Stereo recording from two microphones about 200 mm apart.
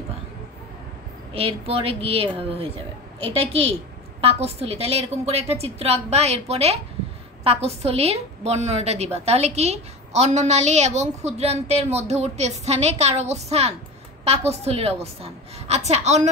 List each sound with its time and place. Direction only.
1.3 s a woman's voice: 30° right (ahead or behind)